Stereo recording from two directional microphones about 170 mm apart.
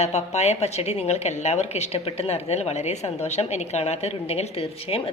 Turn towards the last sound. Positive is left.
turn(degrees=35)  # may be behind; listen again after turning